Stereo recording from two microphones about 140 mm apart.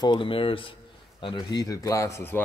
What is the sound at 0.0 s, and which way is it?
Speech, 35° left (ahead or behind).